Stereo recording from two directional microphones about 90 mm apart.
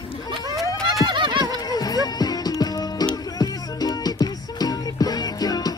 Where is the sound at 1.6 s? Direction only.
45° left (ahead or behind).